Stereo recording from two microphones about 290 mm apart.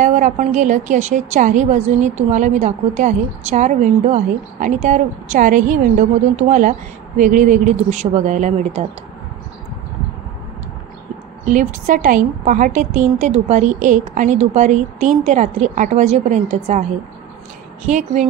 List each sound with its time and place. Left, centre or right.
0.0 s a woman's voice: right
11.4 s a woman's voice: right
17.8 s a woman's voice: right